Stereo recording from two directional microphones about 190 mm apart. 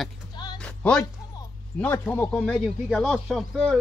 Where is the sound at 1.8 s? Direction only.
10° left (ahead or behind).